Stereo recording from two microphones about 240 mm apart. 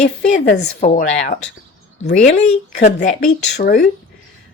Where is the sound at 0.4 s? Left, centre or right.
Left.